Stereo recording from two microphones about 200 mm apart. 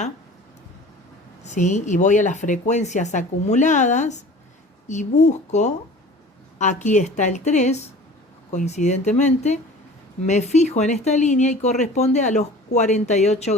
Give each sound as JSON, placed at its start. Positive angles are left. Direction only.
{"t": 1.5, "sound": "speech", "side_deg": 35}